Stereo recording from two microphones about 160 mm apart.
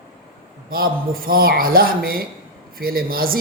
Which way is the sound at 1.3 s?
65° right (ahead or behind).